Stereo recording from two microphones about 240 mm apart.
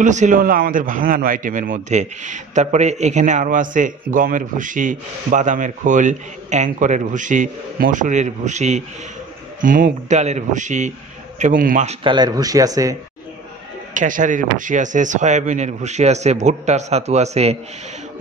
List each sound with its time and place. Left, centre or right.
0.0 s a man's voice: right; by 12.9 s centre
13.9 s speech: right